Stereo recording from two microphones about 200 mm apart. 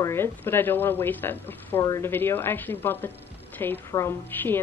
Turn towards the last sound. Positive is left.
turn(degrees=10)  # may be behind; listen again after turning